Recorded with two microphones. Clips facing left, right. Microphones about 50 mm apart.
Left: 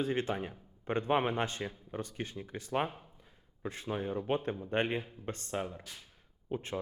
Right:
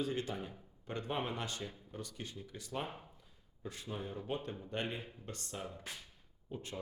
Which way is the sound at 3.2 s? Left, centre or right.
Left.